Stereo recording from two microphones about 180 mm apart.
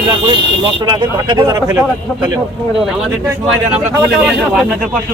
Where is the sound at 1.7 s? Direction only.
10° right (ahead or behind).